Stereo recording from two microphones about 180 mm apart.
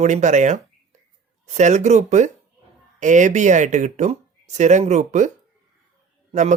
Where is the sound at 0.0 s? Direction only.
40° right (ahead or behind).